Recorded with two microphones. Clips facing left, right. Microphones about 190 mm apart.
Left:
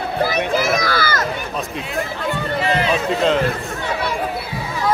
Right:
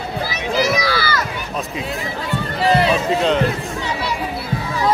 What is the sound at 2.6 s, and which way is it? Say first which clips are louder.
Run: right 6 dB; 35° right (ahead or behind).